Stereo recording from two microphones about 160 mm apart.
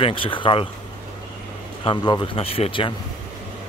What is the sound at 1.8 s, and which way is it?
Speech, 30° left (ahead or behind).